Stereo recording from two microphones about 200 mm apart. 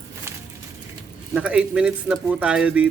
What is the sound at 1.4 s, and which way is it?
Speech, 5° right (ahead or behind).